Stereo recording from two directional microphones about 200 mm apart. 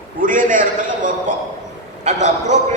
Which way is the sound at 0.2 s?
40° right (ahead or behind).